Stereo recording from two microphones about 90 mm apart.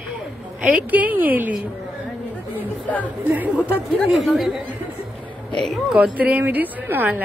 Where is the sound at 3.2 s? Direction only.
20° right (ahead or behind).